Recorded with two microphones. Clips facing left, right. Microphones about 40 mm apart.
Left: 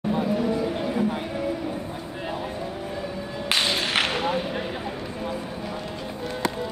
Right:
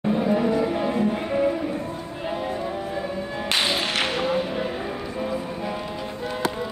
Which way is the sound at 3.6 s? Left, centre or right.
Centre.